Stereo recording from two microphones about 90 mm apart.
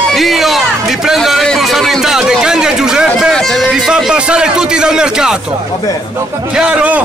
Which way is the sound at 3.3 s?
5° left (ahead or behind).